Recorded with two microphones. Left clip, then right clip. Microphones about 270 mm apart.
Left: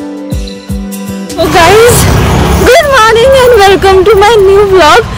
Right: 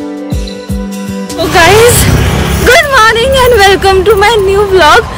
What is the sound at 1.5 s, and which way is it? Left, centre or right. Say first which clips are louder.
Music: left 1 dB; centre.